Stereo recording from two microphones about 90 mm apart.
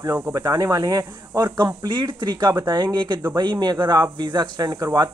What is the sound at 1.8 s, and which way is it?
Speech, 55° right (ahead or behind).